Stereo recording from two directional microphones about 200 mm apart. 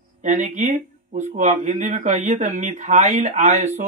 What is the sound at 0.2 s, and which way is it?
Speech, 35° right (ahead or behind).